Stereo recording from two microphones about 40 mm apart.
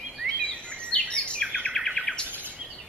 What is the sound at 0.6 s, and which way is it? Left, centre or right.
Bird vocalization, left.